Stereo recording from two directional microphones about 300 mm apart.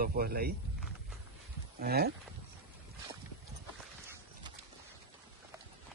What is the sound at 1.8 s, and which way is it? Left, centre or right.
Speech, right.